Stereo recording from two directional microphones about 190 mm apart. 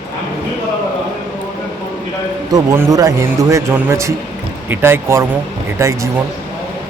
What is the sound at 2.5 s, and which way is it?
A man's voice, 20° right (ahead or behind).